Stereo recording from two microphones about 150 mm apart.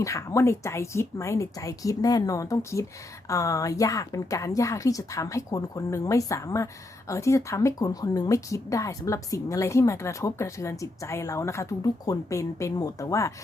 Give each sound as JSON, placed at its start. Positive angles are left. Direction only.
{"t": 0.0, "sound": "speech", "side_deg": 20}